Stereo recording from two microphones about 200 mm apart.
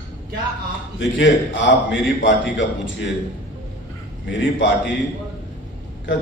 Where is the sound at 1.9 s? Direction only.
65° left (ahead or behind).